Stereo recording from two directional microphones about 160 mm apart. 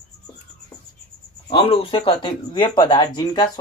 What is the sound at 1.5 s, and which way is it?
Speech, 35° left (ahead or behind).